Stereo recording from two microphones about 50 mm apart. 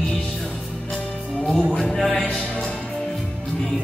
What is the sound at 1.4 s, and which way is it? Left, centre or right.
Speech, centre.